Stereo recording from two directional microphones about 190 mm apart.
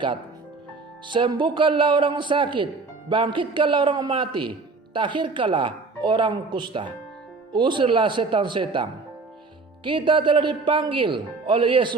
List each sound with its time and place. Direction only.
1.0 s speech: 25° right (ahead or behind)